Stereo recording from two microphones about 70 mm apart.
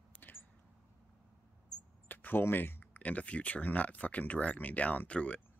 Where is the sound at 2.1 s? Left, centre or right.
Left.